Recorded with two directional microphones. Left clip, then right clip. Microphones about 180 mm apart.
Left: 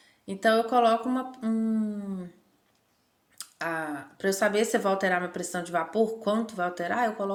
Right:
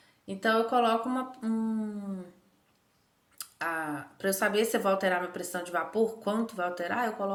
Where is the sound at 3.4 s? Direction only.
25° left (ahead or behind).